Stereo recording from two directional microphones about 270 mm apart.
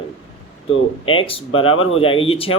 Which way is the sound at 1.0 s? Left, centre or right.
Centre.